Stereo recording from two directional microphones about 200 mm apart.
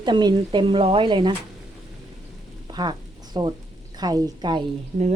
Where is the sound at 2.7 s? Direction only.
20° right (ahead or behind).